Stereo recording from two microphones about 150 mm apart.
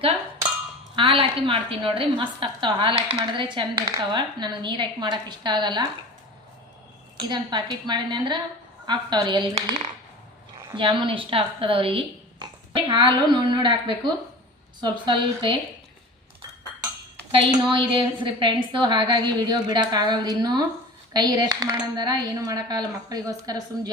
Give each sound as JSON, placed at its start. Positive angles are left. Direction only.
{"t": 0.9, "sound": "a woman's voice", "side_deg": -35}
{"t": 7.2, "sound": "a woman's voice", "side_deg": -30}
{"t": 10.8, "sound": "a woman's voice", "side_deg": -35}
{"t": 17.3, "sound": "a woman's voice", "side_deg": -35}